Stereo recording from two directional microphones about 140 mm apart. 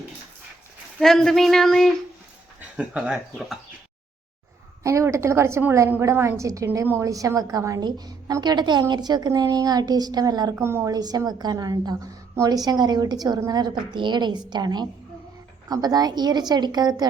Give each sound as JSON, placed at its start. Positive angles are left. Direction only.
{"t": 0.9, "sound": "speech", "side_deg": 0}
{"t": 4.8, "sound": "a woman's voice", "side_deg": -20}
{"t": 10.5, "sound": "a woman's voice", "side_deg": -15}